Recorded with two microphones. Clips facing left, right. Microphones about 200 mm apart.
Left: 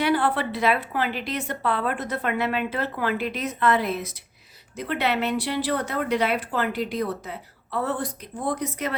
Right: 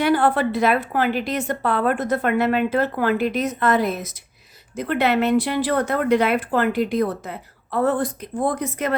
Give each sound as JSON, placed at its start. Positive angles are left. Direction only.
{"t": 0.0, "sound": "a woman's voice", "side_deg": -50}